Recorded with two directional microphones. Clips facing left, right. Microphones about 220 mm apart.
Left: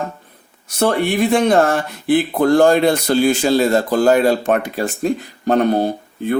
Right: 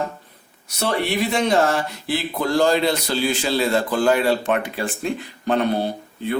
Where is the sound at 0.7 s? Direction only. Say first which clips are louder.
Left 6 dB; 50° left (ahead or behind).